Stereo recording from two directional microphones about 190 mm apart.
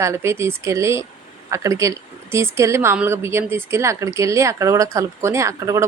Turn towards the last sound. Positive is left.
turn(degrees=-15)  # may be behind; listen again after turning